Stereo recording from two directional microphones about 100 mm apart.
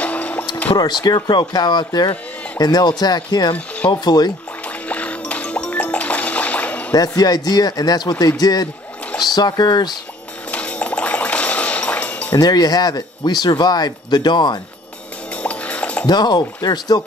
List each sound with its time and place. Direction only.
0.0 s music: 15° left (ahead or behind)
0.7 s speech: 45° left (ahead or behind)
4.8 s music: 15° left (ahead or behind)
6.9 s speech: 40° left (ahead or behind)
10.5 s music: 15° left (ahead or behind)
12.3 s speech: 40° left (ahead or behind)
15.4 s music: 15° left (ahead or behind)
16.1 s speech: 45° left (ahead or behind)